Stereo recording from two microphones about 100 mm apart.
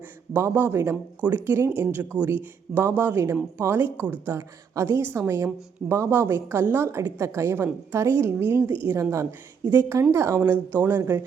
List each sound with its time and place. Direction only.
0.4 s a woman's voice: 25° right (ahead or behind)